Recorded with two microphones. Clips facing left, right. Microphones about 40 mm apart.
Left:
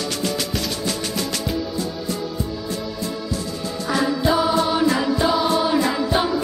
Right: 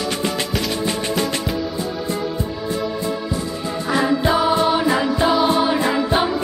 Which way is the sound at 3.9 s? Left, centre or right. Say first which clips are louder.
Right 2 dB; right.